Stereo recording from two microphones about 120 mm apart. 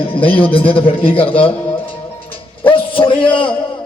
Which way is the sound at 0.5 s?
50° left (ahead or behind).